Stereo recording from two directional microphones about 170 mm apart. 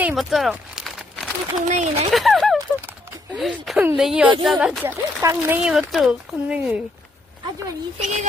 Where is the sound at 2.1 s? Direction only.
Centre (ahead or behind).